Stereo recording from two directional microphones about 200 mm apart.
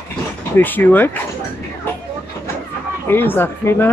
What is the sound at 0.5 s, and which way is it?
Speech, 10° left (ahead or behind).